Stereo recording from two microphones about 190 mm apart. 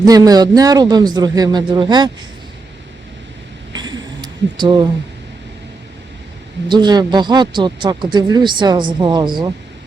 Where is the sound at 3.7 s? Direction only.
25° right (ahead or behind).